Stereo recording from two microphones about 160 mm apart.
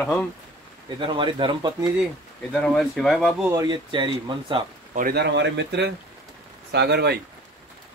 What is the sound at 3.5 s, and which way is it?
Speech, 25° right (ahead or behind).